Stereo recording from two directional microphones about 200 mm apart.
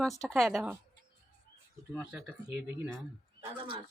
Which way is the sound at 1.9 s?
10° right (ahead or behind).